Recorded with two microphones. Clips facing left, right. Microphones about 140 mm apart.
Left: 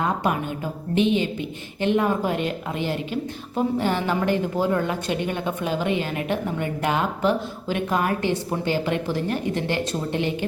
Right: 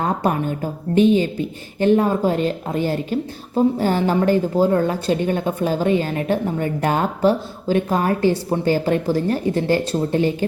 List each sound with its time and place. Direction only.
0.0 s a woman's voice: 40° right (ahead or behind)